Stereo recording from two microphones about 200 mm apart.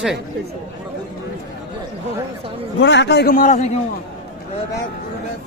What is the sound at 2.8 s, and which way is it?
Speech, 60° left (ahead or behind).